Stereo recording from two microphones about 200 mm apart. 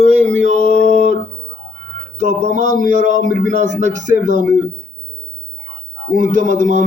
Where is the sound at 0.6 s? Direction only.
45° left (ahead or behind).